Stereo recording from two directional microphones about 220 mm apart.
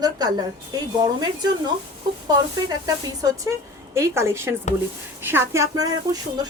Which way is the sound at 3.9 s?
10° right (ahead or behind).